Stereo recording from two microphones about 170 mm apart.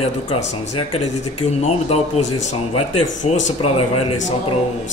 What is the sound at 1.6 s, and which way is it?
Speech, 40° left (ahead or behind).